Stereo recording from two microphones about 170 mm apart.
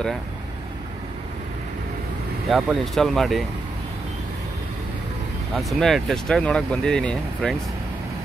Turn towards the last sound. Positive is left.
turn(degrees=5)  # may be behind; listen again after turning